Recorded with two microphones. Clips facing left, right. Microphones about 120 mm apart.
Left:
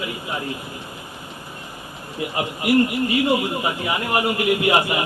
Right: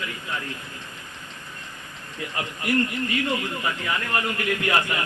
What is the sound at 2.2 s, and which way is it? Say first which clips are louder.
A man's voice: left 6 dB; 15° left (ahead or behind).